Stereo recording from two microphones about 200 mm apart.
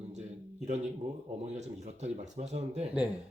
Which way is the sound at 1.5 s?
35° right (ahead or behind).